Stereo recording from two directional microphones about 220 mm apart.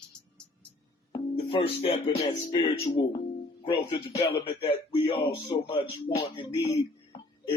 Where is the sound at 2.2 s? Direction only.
25° left (ahead or behind).